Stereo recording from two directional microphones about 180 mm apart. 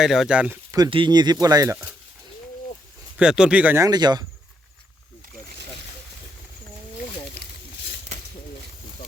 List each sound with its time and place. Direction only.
0.0 s speech: centre (ahead or behind)
0.9 s speech: 25° right (ahead or behind)
3.2 s speech: 5° right (ahead or behind); by 4.3 s 25° right (ahead or behind)